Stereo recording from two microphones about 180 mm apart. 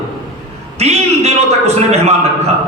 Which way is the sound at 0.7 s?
35° right (ahead or behind).